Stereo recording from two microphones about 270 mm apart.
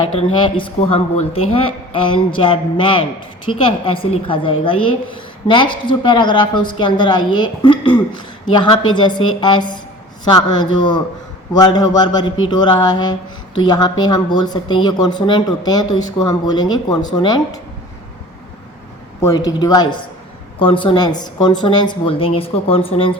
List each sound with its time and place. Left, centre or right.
0.2 s a woman's voice: centre
19.2 s a woman's voice: centre